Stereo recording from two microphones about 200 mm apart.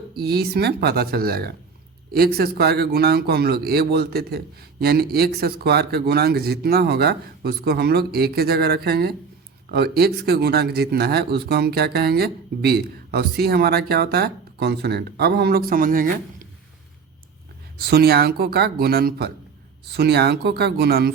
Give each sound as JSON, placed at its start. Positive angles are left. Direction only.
{"t": 0.1, "sound": "speech", "side_deg": -50}
{"t": 17.7, "sound": "speech", "side_deg": -50}